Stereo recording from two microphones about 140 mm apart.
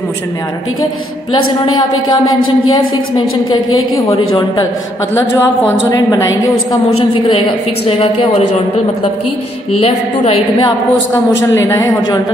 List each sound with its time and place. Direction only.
1.3 s a woman's voice: 30° left (ahead or behind)
5.1 s a woman's voice: 20° left (ahead or behind)
7.8 s a woman's voice: 40° left (ahead or behind)
9.8 s a woman's voice: 45° left (ahead or behind)
11.5 s a woman's voice: 20° left (ahead or behind)